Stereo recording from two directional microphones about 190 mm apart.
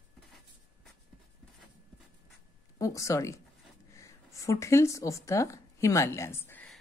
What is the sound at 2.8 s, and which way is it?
Speech, 15° left (ahead or behind).